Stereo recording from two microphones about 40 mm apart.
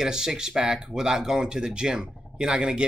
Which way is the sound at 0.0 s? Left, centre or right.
Centre.